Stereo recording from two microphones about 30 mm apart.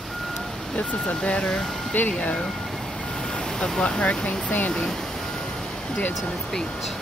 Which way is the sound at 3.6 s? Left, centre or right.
Left.